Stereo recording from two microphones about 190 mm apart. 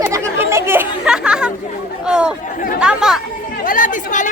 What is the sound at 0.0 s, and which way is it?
Chatter, 15° right (ahead or behind).